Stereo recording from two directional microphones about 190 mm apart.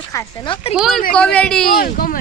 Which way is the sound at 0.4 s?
25° left (ahead or behind).